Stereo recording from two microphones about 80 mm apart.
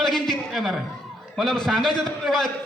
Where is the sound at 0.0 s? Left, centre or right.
Centre.